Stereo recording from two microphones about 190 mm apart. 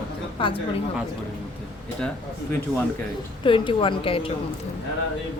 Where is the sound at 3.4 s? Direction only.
25° left (ahead or behind).